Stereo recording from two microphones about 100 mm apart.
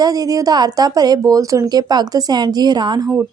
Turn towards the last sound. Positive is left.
turn(degrees=-45)  # may be behind; listen again after turning